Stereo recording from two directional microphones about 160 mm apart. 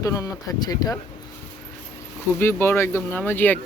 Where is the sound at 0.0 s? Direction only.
20° left (ahead or behind).